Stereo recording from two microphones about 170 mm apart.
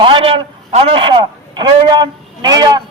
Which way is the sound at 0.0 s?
30° right (ahead or behind).